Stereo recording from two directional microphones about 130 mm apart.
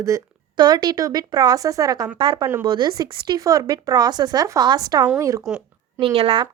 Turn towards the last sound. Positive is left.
turn(degrees=-50)  # may be behind; listen again after turning